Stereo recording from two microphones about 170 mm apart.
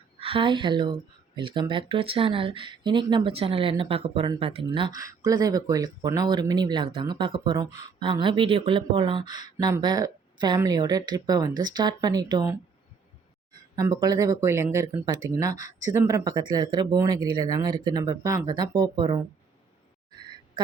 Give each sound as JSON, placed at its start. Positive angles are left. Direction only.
{"t": 0.2, "sound": "speech", "side_deg": -30}
{"t": 13.5, "sound": "speech", "side_deg": -20}
{"t": 20.1, "sound": "a sound", "side_deg": -25}